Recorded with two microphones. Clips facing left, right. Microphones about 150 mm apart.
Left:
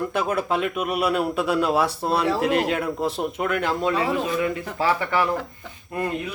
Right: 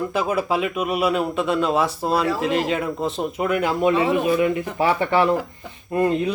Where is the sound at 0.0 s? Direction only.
5° right (ahead or behind).